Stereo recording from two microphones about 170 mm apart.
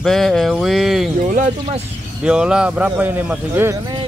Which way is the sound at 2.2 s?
5° right (ahead or behind).